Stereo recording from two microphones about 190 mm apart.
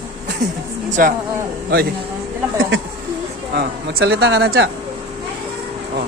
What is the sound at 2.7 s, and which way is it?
Speech, 90° right.